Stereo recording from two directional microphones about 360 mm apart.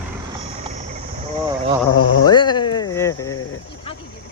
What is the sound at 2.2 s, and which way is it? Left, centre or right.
Speech, centre.